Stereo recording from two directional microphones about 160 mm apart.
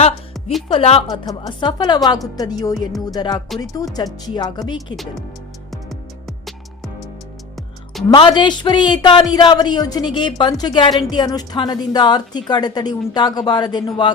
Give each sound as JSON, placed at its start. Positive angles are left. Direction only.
{"t": 0.4, "sound": "music", "side_deg": 0}
{"t": 0.7, "sound": "a woman's voice", "side_deg": 35}
{"t": 5.7, "sound": "music", "side_deg": 0}
{"t": 8.1, "sound": "a woman's voice", "side_deg": 30}